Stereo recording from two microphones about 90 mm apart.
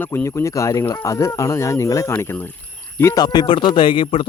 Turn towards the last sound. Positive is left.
turn(degrees=75)  # may be behind; listen again after turning